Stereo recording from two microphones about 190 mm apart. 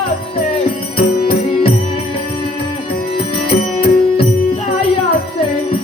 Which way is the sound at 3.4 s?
30° left (ahead or behind).